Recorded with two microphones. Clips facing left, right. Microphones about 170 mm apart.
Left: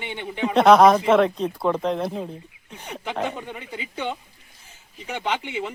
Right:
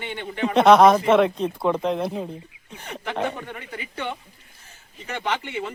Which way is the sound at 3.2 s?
15° left (ahead or behind).